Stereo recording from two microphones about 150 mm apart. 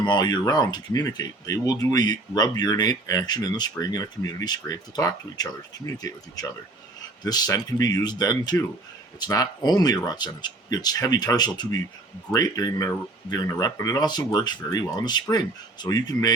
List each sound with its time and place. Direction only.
0.0 s speech: 30° left (ahead or behind)